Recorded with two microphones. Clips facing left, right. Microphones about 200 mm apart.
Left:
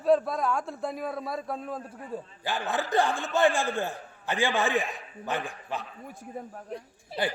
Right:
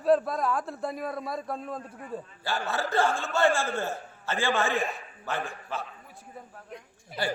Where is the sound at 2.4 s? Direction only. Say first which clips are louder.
Even; 15° left (ahead or behind).